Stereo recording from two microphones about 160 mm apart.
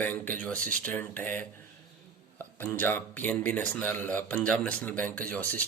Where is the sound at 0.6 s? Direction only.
55° right (ahead or behind).